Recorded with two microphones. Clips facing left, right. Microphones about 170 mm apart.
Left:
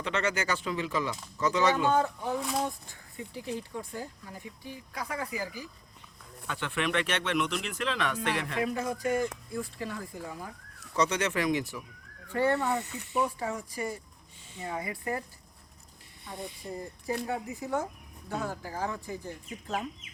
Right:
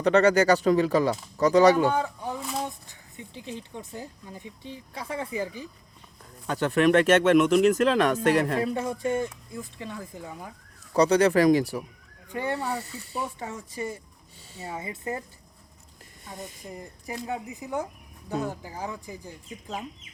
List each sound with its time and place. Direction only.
0.0 s speech: 40° right (ahead or behind)
1.9 s speech: 15° right (ahead or behind)
2.4 s speech: centre (ahead or behind)
2.6 s speech: 20° right (ahead or behind)
6.5 s speech: 40° right (ahead or behind); by 10.5 s 20° right (ahead or behind)
10.9 s speech: 35° right (ahead or behind)
12.3 s speech: 15° right (ahead or behind)
12.8 s speech: 35° right (ahead or behind)
13.7 s speech: 25° right (ahead or behind)
16.2 s speech: 45° right (ahead or behind)
17.2 s speech: 20° right (ahead or behind)